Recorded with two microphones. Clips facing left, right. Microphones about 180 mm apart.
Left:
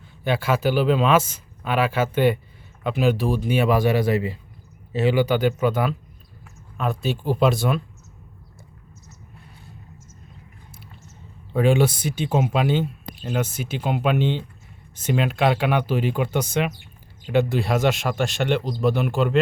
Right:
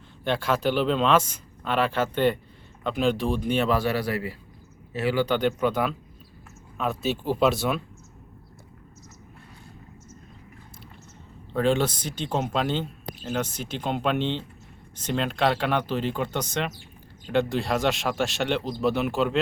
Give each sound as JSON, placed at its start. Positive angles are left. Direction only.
{"t": 0.3, "sound": "speech", "side_deg": 5}
{"t": 5.2, "sound": "speech", "side_deg": 5}
{"t": 11.5, "sound": "speech", "side_deg": 10}